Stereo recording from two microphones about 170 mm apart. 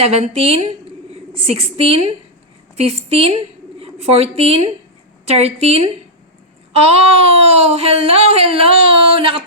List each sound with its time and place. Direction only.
0.0 s a woman's voice: 40° right (ahead or behind)